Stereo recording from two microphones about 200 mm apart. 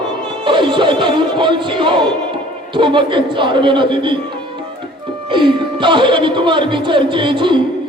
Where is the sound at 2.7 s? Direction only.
25° right (ahead or behind).